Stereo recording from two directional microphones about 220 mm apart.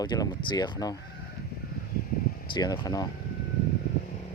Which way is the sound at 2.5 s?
20° left (ahead or behind).